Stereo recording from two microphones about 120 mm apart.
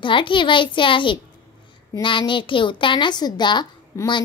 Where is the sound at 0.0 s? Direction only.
45° left (ahead or behind).